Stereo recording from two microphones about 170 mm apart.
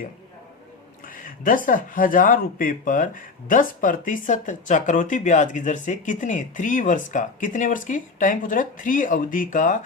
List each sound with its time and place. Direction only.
1.0 s speech: 55° left (ahead or behind)